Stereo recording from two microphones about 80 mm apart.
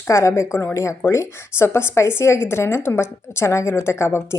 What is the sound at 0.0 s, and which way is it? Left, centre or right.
A woman's voice, left.